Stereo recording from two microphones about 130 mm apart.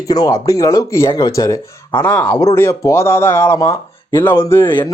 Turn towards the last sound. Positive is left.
turn(degrees=15)  # may be behind; listen again after turning